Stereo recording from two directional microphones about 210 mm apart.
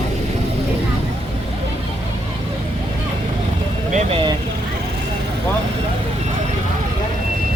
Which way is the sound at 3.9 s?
30° right (ahead or behind).